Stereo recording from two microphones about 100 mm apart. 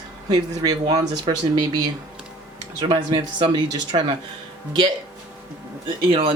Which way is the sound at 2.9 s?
55° right (ahead or behind).